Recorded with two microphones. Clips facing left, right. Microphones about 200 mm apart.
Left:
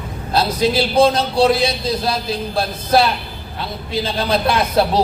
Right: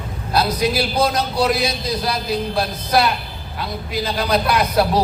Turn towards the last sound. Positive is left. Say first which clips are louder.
# left 1 dB
turn(degrees=25)  # may be behind; listen again after turning